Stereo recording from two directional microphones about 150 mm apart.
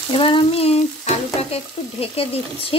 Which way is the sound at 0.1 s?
35° left (ahead or behind).